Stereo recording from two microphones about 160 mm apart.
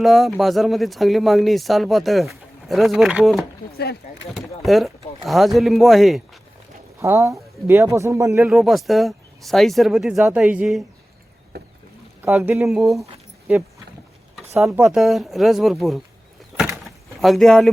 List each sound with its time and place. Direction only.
0.0 s speech: centre (ahead or behind)
4.6 s speech: centre (ahead or behind)
7.0 s speech: 20° right (ahead or behind)
8.4 s speech: centre (ahead or behind)
11.5 s rowboat: 80° right
12.6 s speech: centre (ahead or behind)
14.6 s speech: 5° right (ahead or behind)
16.8 s a sound: centre (ahead or behind)